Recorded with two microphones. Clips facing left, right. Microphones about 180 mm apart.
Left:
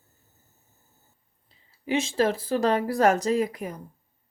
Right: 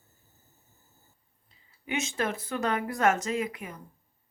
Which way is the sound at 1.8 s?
30° left (ahead or behind).